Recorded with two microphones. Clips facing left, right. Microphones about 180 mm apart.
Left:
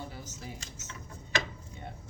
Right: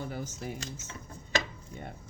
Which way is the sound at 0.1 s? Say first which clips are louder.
Right 7 dB; 55° right (ahead or behind).